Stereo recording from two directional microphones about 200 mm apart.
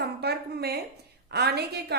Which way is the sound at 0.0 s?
55° right (ahead or behind).